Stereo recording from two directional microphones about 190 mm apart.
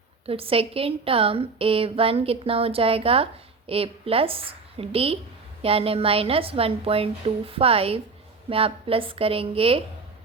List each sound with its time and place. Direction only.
0.3 s a woman's voice: 30° right (ahead or behind)